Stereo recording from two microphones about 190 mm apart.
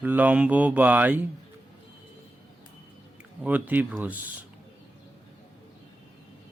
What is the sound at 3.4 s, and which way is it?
Speech, 10° right (ahead or behind).